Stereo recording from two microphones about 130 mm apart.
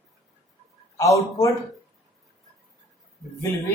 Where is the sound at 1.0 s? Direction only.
25° left (ahead or behind).